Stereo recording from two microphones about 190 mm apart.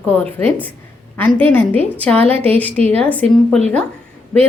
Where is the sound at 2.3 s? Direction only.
30° right (ahead or behind).